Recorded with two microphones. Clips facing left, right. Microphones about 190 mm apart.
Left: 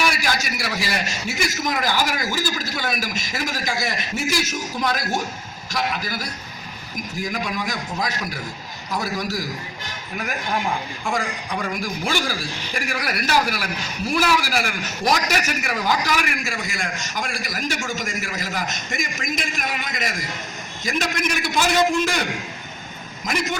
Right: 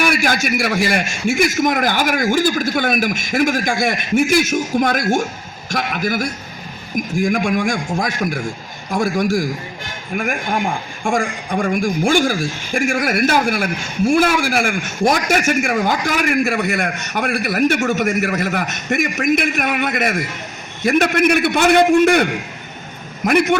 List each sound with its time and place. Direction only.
0.0 s a man's voice: 55° right (ahead or behind)